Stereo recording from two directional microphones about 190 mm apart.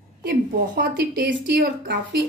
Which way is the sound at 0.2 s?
60° right (ahead or behind).